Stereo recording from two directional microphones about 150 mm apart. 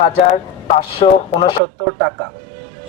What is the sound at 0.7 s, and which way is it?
Speech, 40° left (ahead or behind).